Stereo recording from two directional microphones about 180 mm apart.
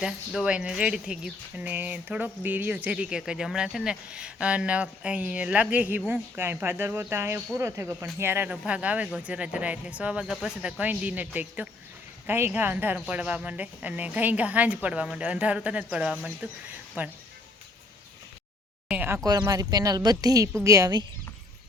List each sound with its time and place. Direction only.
0.0 s speech: 5° right (ahead or behind)
18.9 s speech: 10° right (ahead or behind)